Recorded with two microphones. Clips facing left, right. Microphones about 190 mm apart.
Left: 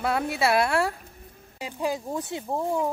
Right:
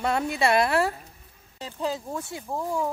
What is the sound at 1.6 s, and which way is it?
Speech, 15° left (ahead or behind).